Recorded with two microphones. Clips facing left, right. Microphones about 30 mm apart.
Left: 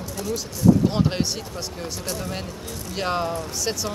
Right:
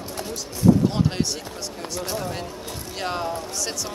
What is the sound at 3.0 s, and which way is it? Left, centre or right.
Speech, centre.